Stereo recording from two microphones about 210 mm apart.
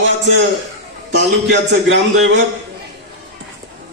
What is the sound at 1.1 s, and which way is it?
A man's voice, 60° right (ahead or behind).